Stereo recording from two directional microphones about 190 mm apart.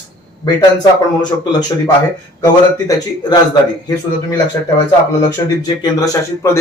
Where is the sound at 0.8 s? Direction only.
20° left (ahead or behind).